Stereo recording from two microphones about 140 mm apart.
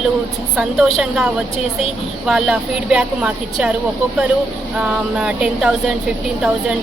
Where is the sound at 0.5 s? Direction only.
Centre (ahead or behind).